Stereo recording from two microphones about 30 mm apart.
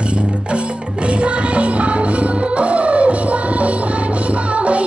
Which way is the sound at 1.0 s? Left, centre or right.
Right.